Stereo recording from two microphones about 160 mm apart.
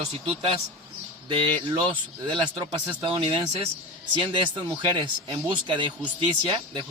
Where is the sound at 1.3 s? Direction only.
30° right (ahead or behind).